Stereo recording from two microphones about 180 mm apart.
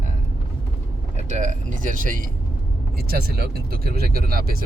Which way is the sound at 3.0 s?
60° right (ahead or behind).